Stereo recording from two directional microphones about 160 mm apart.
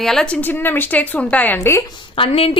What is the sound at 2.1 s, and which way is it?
Speech, 35° left (ahead or behind).